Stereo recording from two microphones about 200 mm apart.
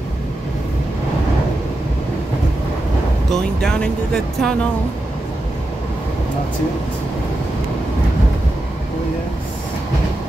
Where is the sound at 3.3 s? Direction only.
5° left (ahead or behind).